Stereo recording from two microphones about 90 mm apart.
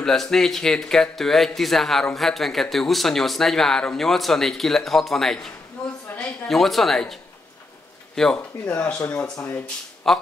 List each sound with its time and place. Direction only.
0.0 s speech: 5° left (ahead or behind)
8.2 s speech: 5° left (ahead or behind)
9.2 s speech: 30° left (ahead or behind)
10.1 s speech: 5° left (ahead or behind)